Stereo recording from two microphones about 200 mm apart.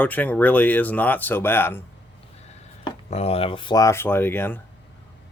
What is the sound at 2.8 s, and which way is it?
Speech, 30° left (ahead or behind).